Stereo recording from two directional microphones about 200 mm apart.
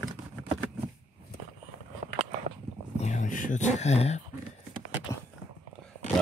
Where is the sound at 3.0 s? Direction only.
40° left (ahead or behind).